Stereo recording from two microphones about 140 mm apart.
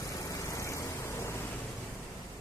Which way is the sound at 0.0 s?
25° left (ahead or behind).